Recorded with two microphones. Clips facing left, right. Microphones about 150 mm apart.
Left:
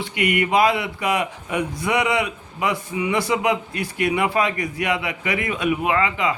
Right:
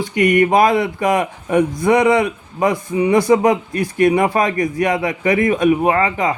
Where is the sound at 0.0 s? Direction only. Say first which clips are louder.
Right 8 dB; 45° right (ahead or behind).